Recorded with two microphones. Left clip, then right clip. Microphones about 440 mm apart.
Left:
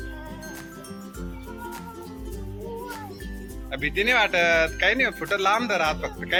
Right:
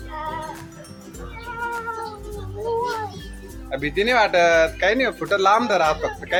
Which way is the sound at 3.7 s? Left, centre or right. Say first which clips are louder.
Right 3 dB; left.